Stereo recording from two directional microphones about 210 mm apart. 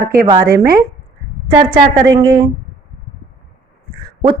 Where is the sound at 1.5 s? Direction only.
20° right (ahead or behind).